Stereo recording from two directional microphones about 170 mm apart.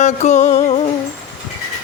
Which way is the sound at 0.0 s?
45° left (ahead or behind).